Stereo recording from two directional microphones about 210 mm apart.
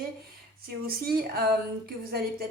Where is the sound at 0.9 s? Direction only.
45° right (ahead or behind).